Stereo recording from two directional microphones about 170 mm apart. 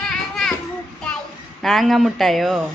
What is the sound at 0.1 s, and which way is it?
Children playing, centre (ahead or behind).